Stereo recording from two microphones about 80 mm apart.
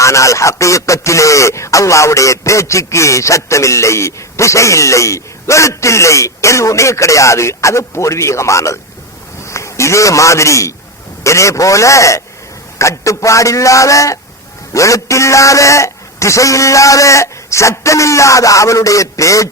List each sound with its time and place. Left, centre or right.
0.0 s a man's voice: left